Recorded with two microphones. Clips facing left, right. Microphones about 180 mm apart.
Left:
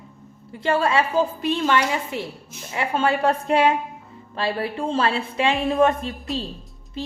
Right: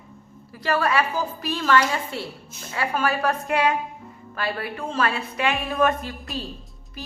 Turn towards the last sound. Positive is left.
turn(degrees=25)  # may be behind; listen again after turning